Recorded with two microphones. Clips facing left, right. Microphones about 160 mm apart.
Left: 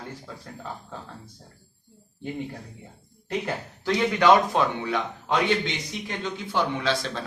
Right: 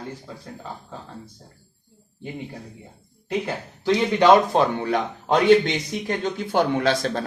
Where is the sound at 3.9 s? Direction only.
25° right (ahead or behind).